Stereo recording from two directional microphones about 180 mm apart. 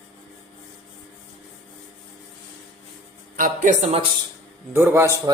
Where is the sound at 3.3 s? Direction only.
50° right (ahead or behind).